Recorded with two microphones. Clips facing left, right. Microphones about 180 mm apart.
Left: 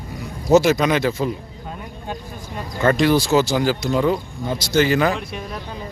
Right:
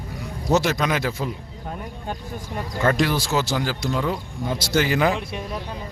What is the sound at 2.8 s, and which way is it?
A man's voice, centre (ahead or behind).